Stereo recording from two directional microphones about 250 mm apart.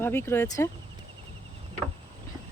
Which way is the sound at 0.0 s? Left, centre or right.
Centre.